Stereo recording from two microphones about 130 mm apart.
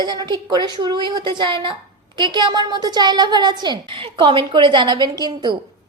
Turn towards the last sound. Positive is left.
turn(degrees=-35)  # may be behind; listen again after turning